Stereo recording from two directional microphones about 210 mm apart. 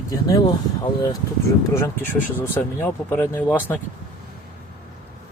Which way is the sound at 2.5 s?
10° left (ahead or behind).